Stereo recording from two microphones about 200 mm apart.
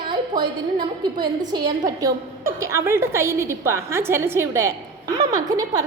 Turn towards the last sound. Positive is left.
turn(degrees=-20)  # may be behind; listen again after turning